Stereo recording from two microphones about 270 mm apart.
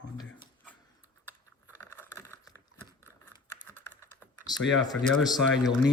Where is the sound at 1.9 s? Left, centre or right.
Centre.